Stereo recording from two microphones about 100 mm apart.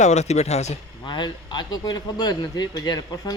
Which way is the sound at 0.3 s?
90° left.